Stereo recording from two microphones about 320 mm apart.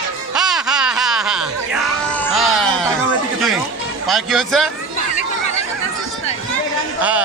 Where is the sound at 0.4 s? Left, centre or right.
Centre.